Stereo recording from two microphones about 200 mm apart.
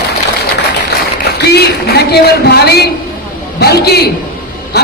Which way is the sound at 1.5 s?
50° left (ahead or behind).